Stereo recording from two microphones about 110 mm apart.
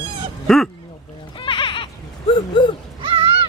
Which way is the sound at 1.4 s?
50° left (ahead or behind).